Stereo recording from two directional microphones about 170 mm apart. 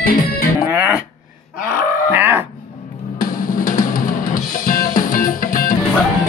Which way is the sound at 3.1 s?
50° left (ahead or behind).